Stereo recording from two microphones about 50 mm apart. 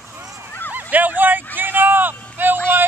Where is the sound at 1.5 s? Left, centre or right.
Right.